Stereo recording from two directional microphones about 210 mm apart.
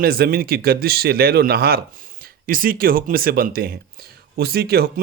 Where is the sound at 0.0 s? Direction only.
45° right (ahead or behind).